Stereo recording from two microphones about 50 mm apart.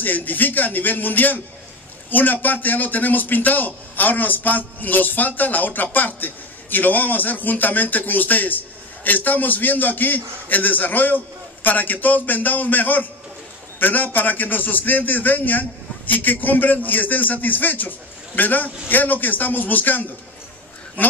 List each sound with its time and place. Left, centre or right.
0.0 s a man's voice: left